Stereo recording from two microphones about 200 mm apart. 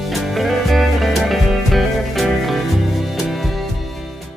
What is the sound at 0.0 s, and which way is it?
Music, centre (ahead or behind).